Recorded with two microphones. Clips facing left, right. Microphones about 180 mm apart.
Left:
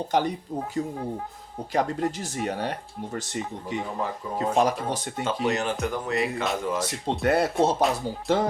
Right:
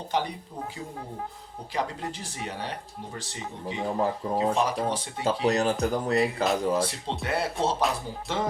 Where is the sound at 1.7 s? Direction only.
45° left (ahead or behind).